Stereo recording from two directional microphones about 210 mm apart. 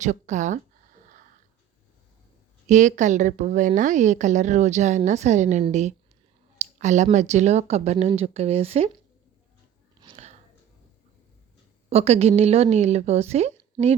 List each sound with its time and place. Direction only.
0.0 s a woman's voice: 35° right (ahead or behind)
2.6 s a woman's voice: 35° right (ahead or behind)
10.0 s a sound: 25° right (ahead or behind)
11.9 s a woman's voice: 30° right (ahead or behind)